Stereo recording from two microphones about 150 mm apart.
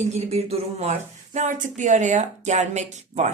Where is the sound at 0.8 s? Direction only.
50° right (ahead or behind).